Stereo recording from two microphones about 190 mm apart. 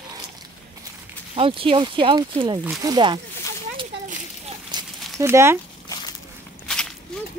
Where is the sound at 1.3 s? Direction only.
30° right (ahead or behind).